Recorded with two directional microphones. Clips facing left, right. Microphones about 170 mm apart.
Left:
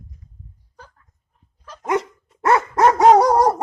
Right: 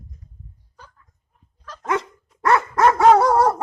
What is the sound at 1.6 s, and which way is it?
Dog, 15° left (ahead or behind).